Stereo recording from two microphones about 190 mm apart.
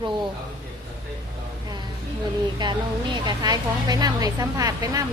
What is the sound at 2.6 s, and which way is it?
Speech, 25° right (ahead or behind).